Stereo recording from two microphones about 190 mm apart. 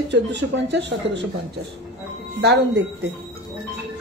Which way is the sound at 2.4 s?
60° right (ahead or behind).